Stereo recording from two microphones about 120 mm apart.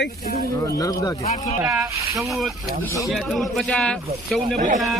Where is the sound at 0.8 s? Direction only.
30° left (ahead or behind).